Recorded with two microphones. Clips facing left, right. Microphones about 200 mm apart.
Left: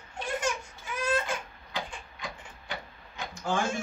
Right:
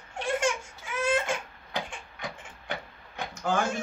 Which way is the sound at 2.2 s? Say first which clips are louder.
Right 3 dB; 55° right (ahead or behind).